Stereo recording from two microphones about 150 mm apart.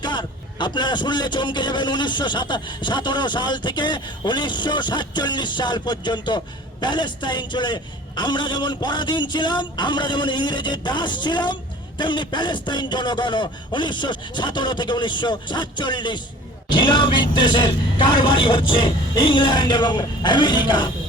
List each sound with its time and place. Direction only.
0.0 s speech: 30° left (ahead or behind)